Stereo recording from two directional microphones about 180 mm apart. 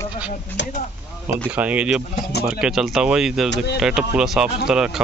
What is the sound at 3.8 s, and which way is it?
Speech, 5° right (ahead or behind).